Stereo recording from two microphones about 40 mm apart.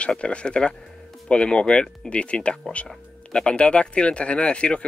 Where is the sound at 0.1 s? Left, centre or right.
Left.